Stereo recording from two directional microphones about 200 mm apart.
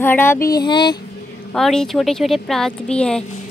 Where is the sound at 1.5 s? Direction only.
5° left (ahead or behind).